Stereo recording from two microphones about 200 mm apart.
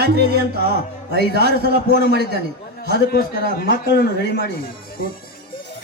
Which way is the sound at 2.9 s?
55° left (ahead or behind).